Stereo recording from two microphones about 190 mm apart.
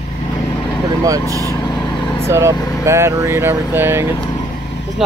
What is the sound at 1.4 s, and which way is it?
Vehicle, 15° left (ahead or behind).